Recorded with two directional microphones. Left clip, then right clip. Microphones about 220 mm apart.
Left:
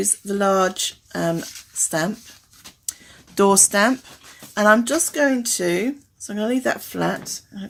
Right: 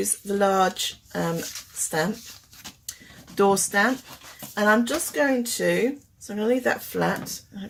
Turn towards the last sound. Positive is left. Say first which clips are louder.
# left 2 dB
turn(degrees=35)  # may be behind; listen again after turning